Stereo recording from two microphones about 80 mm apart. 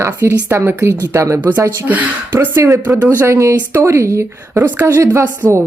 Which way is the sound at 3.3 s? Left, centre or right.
Right.